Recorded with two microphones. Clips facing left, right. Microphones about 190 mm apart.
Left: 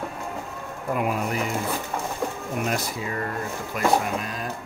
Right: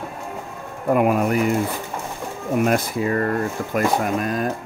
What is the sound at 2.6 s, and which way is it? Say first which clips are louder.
Speech: right 8 dB; 60° right (ahead or behind).